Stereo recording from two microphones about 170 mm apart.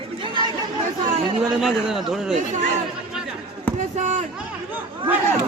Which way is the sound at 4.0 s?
45° right (ahead or behind).